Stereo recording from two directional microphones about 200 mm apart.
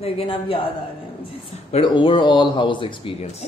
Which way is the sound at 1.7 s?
25° left (ahead or behind).